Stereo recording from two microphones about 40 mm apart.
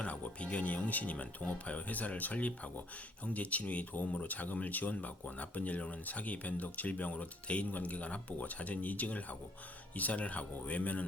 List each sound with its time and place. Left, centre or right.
0.0 s music: left
1.1 s speech: left